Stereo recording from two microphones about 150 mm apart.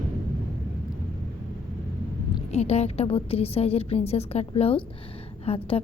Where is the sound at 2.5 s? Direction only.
45° left (ahead or behind).